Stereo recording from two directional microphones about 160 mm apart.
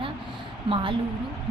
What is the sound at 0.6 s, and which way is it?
Speech, 35° right (ahead or behind).